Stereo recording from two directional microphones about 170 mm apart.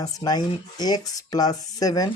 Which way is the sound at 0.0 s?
25° left (ahead or behind).